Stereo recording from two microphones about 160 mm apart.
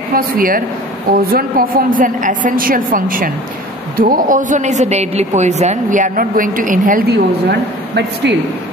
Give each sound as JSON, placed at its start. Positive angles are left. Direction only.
{"t": 0.1, "sound": "a woman's voice", "side_deg": -60}
{"t": 7.9, "sound": "speech", "side_deg": -90}